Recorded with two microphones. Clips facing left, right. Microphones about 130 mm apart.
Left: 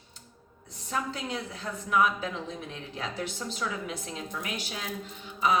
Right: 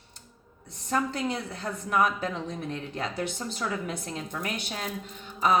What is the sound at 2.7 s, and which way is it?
A woman's voice, 55° right (ahead or behind).